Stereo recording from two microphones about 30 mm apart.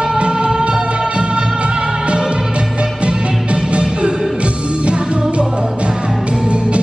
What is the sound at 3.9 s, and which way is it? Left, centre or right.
Music, right.